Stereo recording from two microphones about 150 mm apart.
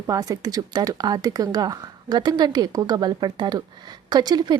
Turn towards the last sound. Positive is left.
turn(degrees=-25)  # may be behind; listen again after turning